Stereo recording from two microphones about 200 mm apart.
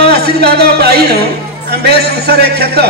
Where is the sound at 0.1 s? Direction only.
50° right (ahead or behind).